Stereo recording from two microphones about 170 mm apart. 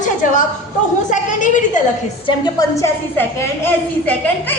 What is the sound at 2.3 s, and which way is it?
A woman's voice, 20° left (ahead or behind).